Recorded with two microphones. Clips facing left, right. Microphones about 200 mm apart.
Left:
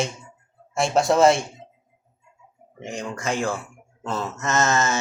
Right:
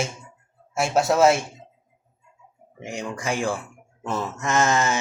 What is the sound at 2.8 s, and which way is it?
Speech, 10° right (ahead or behind).